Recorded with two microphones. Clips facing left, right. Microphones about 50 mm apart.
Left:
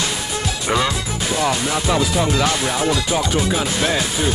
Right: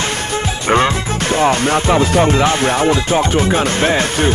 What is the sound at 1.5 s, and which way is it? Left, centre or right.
Music, right.